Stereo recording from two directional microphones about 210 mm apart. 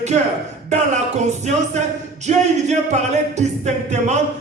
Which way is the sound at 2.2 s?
35° right (ahead or behind).